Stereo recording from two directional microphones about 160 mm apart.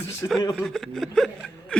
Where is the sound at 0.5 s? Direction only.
Centre (ahead or behind).